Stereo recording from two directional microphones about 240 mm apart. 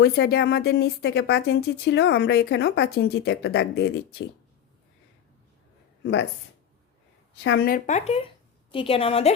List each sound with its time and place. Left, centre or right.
0.0 s speech: left
7.4 s speech: left